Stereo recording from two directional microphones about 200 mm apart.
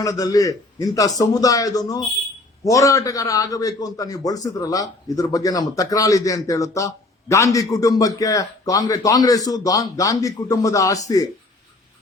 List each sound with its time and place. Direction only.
0.0 s a man's voice: 15° left (ahead or behind)